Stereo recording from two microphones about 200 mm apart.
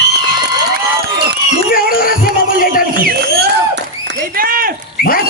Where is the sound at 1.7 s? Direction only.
45° left (ahead or behind).